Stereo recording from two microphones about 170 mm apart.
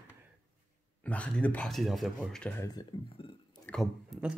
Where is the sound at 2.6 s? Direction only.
25° left (ahead or behind).